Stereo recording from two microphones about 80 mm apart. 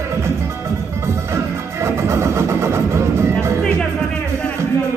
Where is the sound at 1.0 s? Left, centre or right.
Right.